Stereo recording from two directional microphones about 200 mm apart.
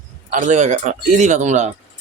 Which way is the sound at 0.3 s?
40° right (ahead or behind).